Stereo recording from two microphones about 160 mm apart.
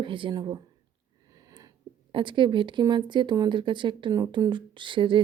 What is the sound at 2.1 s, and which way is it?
Speech, 30° right (ahead or behind).